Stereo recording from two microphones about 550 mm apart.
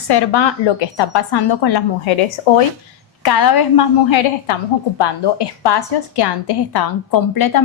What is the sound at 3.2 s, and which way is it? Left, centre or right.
A woman's voice, left.